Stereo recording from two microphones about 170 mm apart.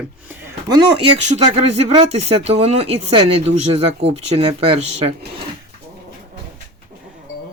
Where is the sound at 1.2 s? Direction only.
40° right (ahead or behind).